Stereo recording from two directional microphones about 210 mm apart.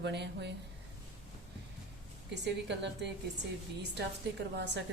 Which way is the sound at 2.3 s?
55° right (ahead or behind).